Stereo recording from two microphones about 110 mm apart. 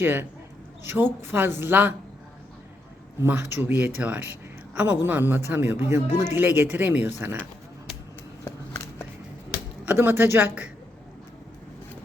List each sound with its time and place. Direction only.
0.0 s speech: 20° right (ahead or behind)
3.2 s a woman's voice: 20° right (ahead or behind)
8.4 s a sound: 25° left (ahead or behind)
9.8 s speech: 15° right (ahead or behind)